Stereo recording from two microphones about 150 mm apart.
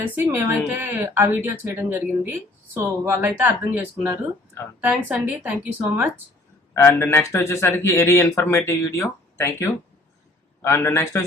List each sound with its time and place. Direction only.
0.0 s speech: 15° right (ahead or behind)
6.7 s speech: 15° left (ahead or behind)